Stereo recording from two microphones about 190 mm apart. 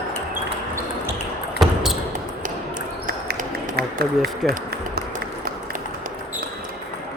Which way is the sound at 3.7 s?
55° right (ahead or behind).